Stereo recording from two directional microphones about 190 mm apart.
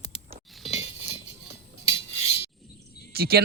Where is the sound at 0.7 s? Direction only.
35° left (ahead or behind).